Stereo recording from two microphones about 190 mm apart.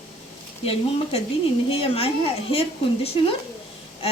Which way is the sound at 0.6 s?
30° left (ahead or behind).